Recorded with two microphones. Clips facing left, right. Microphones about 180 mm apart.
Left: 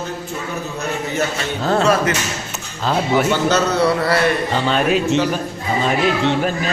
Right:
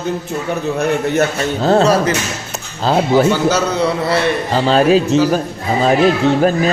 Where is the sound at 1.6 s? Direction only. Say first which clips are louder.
Right 4 dB; 35° right (ahead or behind).